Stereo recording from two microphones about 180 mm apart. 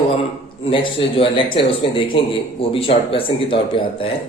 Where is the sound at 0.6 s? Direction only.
30° left (ahead or behind).